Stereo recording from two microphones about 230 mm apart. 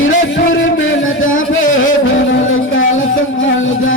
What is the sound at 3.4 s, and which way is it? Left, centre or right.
Music, left.